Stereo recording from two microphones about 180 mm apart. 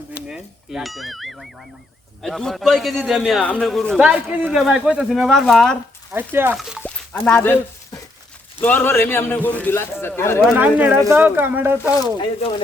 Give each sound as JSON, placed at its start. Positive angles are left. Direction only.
{"t": 0.3, "sound": "a man's voice", "side_deg": -5}
{"t": 6.1, "sound": "speech", "side_deg": -10}
{"t": 6.8, "sound": "a sound", "side_deg": 10}
{"t": 8.6, "sound": "a man's voice", "side_deg": 10}
{"t": 10.5, "sound": "speech", "side_deg": -10}
{"t": 12.2, "sound": "speech", "side_deg": 25}